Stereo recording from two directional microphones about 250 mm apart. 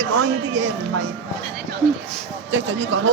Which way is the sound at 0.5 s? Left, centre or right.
Right.